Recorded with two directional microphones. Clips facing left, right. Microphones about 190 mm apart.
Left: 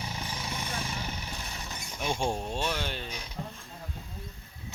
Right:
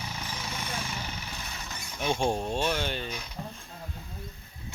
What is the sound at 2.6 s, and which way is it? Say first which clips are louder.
Speech: right 3 dB; centre (ahead or behind).